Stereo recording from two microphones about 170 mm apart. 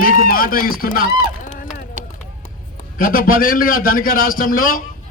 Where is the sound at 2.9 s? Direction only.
55° left (ahead or behind).